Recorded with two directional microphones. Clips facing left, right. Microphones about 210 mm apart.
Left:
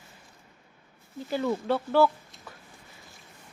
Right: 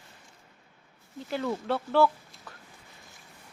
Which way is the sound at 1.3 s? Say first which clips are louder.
Left 3 dB; centre (ahead or behind).